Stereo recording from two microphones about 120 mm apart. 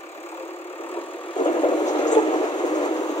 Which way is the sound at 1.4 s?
45° left (ahead or behind).